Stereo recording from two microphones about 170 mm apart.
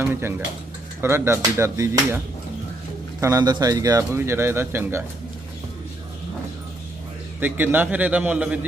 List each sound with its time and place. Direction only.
0.0 s speech: 15° right (ahead or behind)
7.3 s speech: 10° right (ahead or behind)